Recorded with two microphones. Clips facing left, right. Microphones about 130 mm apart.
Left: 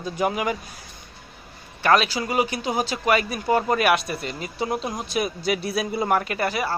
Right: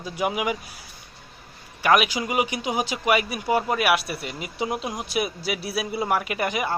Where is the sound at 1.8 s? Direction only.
15° right (ahead or behind).